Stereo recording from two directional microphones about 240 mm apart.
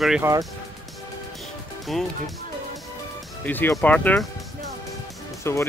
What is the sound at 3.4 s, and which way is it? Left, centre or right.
Speech, centre.